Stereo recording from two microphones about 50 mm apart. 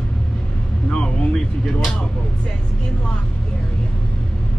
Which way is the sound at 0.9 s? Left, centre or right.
Centre.